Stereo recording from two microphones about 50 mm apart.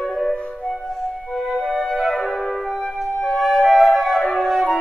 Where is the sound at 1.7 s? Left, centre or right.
Centre.